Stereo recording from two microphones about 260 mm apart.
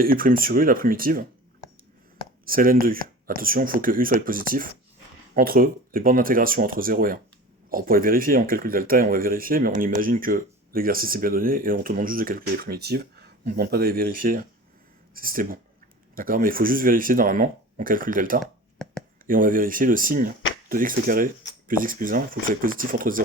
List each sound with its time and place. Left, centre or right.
0.0 s speech: right
2.4 s speech: right